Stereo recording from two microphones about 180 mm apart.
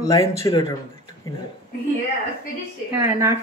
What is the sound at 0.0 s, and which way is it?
Speech, 15° left (ahead or behind).